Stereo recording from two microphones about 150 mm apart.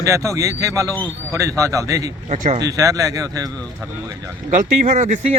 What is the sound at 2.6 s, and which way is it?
Speech, 20° right (ahead or behind).